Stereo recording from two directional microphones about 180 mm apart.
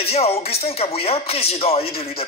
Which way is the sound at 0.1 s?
35° left (ahead or behind).